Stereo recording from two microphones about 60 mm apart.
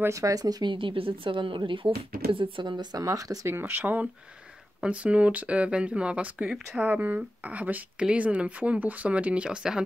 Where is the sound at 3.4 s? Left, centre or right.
Right.